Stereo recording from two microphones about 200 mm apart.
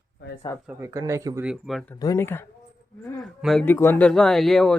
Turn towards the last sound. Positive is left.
turn(degrees=0)  # may be behind; listen again after turning